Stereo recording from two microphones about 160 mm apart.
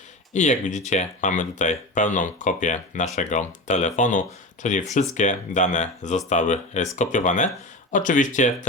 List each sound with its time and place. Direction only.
0.3 s speech: 50° left (ahead or behind)